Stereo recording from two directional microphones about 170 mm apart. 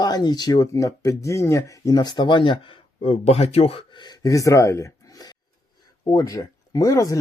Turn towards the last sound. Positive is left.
turn(degrees=20)  # may be behind; listen again after turning